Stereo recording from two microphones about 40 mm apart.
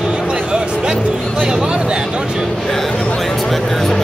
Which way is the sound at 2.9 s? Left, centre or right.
Left.